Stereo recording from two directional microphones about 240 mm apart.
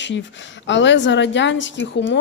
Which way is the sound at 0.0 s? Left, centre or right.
Left.